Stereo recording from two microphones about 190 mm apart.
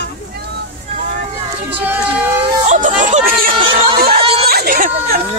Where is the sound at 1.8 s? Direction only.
10° right (ahead or behind).